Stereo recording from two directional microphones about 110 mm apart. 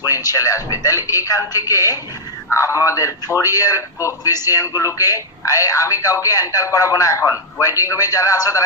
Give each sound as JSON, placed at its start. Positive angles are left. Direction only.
{"t": 0.0, "sound": "a man's voice", "side_deg": 35}